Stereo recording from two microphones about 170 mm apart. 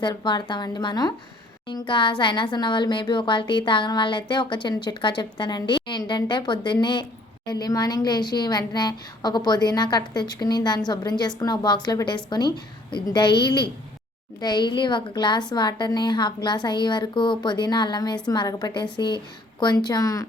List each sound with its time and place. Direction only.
0.0 s a woman's voice: 25° left (ahead or behind)